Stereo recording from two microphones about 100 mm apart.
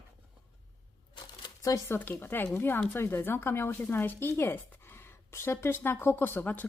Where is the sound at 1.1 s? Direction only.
50° left (ahead or behind).